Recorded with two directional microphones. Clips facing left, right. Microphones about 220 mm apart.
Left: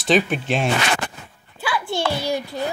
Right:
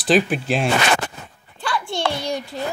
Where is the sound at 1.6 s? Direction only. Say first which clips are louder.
Even; 5° left (ahead or behind).